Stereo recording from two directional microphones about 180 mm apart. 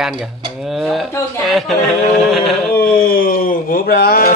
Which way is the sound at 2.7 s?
55° left (ahead or behind).